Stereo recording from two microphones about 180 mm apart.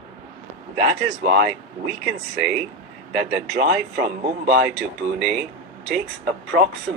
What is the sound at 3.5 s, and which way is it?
Speech, 55° right (ahead or behind).